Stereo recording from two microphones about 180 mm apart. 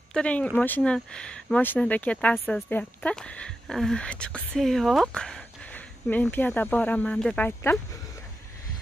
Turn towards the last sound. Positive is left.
turn(degrees=10)  # may be behind; listen again after turning